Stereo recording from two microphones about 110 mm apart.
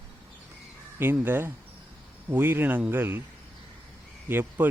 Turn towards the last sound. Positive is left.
turn(degrees=-20)  # may be behind; listen again after turning